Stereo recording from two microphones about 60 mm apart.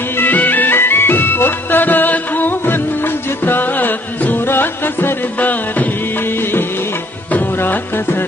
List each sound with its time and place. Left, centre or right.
0.2 s music: left
7.3 s music: left